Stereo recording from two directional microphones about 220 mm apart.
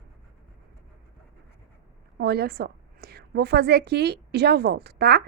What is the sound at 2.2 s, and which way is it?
A woman's voice, 45° right (ahead or behind).